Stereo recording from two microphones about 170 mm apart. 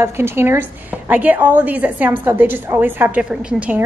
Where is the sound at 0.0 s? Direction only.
15° right (ahead or behind).